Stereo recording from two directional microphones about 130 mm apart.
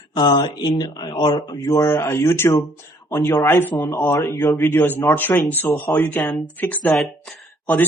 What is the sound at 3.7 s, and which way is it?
Speech, 25° left (ahead or behind).